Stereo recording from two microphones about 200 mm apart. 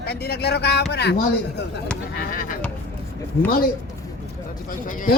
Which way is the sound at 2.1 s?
45° left (ahead or behind).